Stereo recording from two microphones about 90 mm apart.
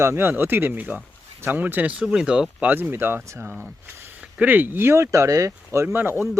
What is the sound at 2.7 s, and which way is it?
Speech, 20° right (ahead or behind).